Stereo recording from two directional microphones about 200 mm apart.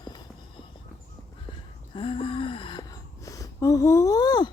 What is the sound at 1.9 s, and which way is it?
Speech, 25° left (ahead or behind).